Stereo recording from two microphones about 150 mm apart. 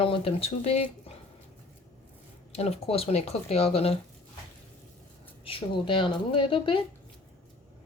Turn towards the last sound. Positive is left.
turn(degrees=35)  # may be behind; listen again after turning